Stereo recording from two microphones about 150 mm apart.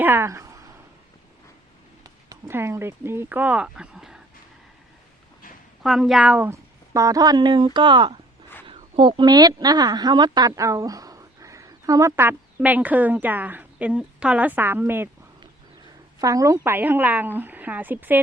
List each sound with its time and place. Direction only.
0.0 s speech: 15° right (ahead or behind)
2.0 s speech: 20° right (ahead or behind); by 4.2 s 5° right (ahead or behind)
5.8 s a woman's voice: centre (ahead or behind)
16.2 s a woman's voice: 20° right (ahead or behind)